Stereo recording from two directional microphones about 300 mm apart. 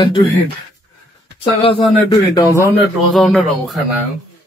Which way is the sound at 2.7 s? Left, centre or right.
Centre.